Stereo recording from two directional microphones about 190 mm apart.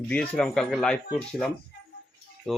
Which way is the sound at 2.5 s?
5° left (ahead or behind).